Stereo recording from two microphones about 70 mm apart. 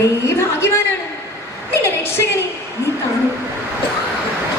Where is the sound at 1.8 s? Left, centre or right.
Left.